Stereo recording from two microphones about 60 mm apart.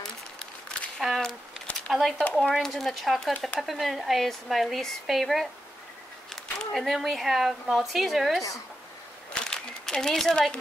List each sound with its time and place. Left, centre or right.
0.9 s a sound: centre
1.9 s speech: centre
3.3 s speech: left
3.6 s speech: centre
6.7 s speech: centre
9.3 s a sound: centre